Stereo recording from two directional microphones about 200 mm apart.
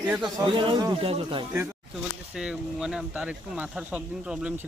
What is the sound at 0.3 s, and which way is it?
A man's voice, 25° right (ahead or behind).